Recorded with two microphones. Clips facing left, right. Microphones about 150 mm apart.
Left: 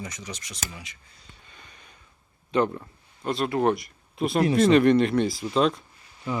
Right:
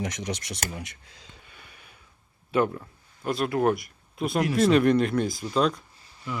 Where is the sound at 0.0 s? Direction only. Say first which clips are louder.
Right 6 dB; 80° right.